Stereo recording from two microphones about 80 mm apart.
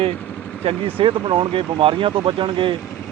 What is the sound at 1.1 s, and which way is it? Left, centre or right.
Speech, right.